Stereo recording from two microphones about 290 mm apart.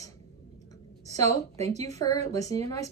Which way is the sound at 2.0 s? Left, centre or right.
Centre.